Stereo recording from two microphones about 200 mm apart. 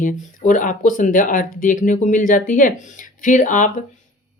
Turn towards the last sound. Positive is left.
turn(degrees=40)  # may be behind; listen again after turning